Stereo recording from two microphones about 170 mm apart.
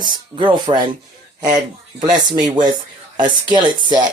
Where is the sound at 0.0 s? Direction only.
25° right (ahead or behind).